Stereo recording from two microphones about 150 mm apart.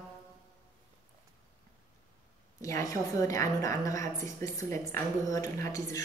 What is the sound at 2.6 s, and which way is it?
A woman's voice, 20° left (ahead or behind).